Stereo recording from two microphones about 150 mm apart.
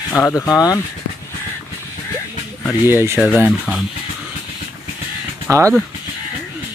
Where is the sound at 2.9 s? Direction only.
15° right (ahead or behind).